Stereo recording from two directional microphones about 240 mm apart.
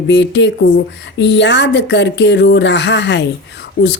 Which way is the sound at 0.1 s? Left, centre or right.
Left.